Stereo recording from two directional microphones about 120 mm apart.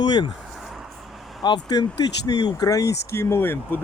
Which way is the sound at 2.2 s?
35° left (ahead or behind).